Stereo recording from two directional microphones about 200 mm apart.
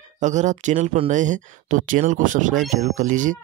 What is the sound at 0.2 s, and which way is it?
Speech, 35° right (ahead or behind).